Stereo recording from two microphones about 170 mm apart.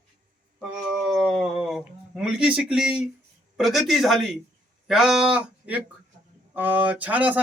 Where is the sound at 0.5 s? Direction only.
Centre (ahead or behind).